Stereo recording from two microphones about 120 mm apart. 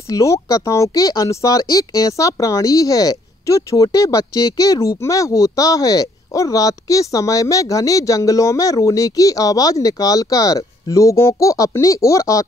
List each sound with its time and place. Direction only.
0.1 s speech: 25° left (ahead or behind)